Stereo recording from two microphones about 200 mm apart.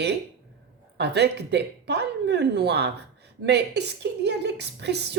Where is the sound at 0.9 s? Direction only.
55° right (ahead or behind).